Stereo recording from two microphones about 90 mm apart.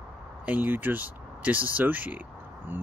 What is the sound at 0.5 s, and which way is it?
Speech, 20° right (ahead or behind).